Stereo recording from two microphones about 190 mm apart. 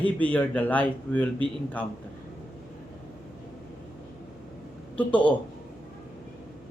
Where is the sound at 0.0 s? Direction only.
10° left (ahead or behind).